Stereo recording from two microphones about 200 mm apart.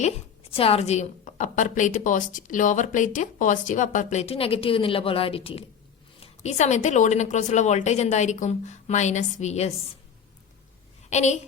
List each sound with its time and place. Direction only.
0.5 s a woman's voice: 30° left (ahead or behind)
11.1 s a woman's voice: 35° left (ahead or behind)